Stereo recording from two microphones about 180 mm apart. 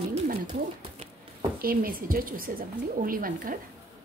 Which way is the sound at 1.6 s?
55° right (ahead or behind).